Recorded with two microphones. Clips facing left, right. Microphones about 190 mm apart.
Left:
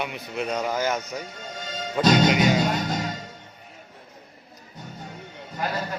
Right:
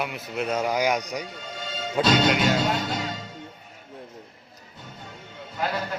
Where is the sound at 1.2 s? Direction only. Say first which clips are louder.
Even; 45° left (ahead or behind).